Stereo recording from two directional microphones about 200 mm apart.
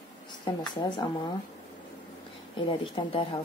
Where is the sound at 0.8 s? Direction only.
25° left (ahead or behind).